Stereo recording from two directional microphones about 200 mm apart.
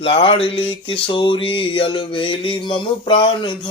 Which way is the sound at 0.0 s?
30° left (ahead or behind).